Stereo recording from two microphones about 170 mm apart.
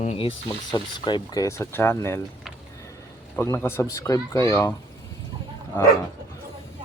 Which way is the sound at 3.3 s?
15° left (ahead or behind).